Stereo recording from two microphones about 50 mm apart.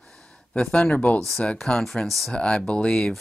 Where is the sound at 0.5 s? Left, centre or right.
Centre.